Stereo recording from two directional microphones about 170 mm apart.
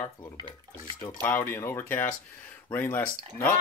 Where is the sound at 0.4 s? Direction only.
25° right (ahead or behind).